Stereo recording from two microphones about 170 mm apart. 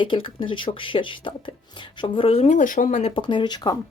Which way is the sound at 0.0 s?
30° left (ahead or behind).